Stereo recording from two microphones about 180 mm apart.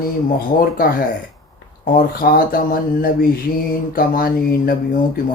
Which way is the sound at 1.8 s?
55° left (ahead or behind).